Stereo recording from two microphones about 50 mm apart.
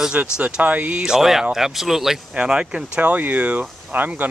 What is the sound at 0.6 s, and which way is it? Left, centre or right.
Speech, right.